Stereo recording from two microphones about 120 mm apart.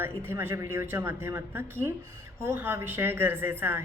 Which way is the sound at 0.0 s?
20° right (ahead or behind).